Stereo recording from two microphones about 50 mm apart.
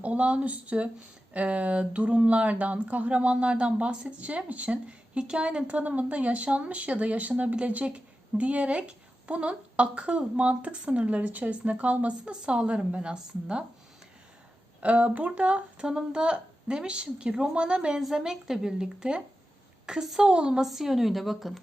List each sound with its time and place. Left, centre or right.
0.0 s speech: right
14.8 s speech: right
19.8 s a sound: centre
20.2 s speech: centre
20.7 s speech: centre